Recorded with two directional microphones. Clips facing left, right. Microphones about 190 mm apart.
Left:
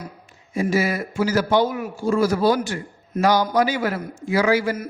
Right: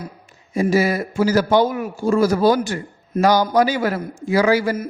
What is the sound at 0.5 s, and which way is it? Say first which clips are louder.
A man's voice: right 4 dB; 40° right (ahead or behind).